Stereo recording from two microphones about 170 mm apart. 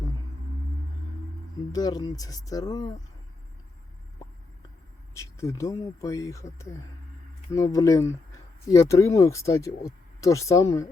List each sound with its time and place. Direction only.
1.7 s speech: 25° left (ahead or behind)
5.1 s speech: 15° left (ahead or behind)